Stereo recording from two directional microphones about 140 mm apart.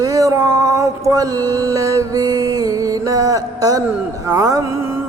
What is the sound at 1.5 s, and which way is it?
Music, 25° right (ahead or behind).